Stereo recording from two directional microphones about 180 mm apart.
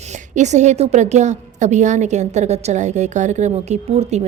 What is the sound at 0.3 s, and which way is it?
A woman's voice, 40° right (ahead or behind).